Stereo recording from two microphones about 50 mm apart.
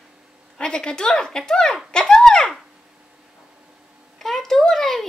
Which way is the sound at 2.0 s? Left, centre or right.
Centre.